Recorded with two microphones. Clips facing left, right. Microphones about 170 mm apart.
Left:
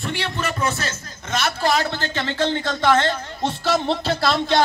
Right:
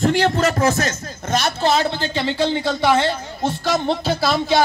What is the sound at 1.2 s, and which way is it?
Speech, 35° right (ahead or behind).